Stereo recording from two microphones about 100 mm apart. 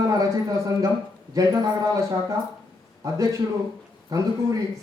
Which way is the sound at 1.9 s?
35° right (ahead or behind).